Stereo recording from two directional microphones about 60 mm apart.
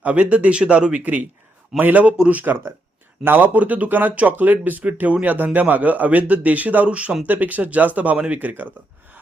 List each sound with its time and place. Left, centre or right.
0.0 s speech: right
3.2 s speech: right
7.3 s speech: right